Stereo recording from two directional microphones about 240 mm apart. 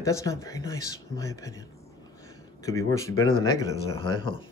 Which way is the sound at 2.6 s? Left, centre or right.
Centre.